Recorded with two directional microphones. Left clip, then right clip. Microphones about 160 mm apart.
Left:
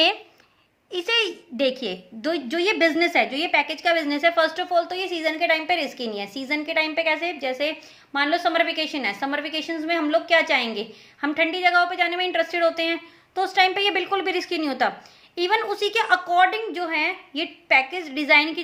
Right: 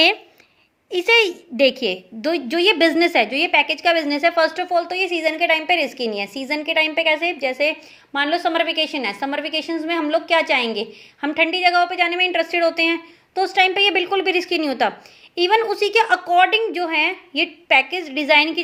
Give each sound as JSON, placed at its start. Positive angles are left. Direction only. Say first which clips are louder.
{"t": 0.9, "sound": "a woman's voice", "louder": "right 7 dB", "side_deg": -20}